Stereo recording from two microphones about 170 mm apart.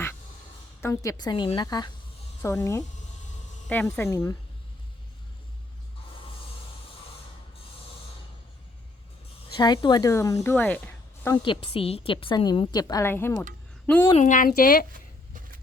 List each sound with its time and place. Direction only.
0.8 s a woman's voice: 20° left (ahead or behind)
9.6 s speech: 25° left (ahead or behind); by 11.3 s 10° left (ahead or behind)
11.4 s a woman's voice: 30° left (ahead or behind); by 14.1 s 10° left (ahead or behind)
14.2 s speech: 50° left (ahead or behind)